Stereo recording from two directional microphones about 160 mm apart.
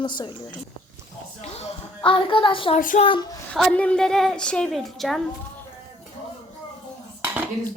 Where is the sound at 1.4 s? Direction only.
35° left (ahead or behind).